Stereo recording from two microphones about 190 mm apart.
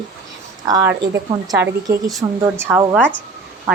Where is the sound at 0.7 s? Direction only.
10° right (ahead or behind).